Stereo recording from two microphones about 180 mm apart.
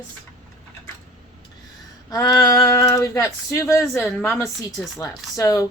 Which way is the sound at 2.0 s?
20° left (ahead or behind).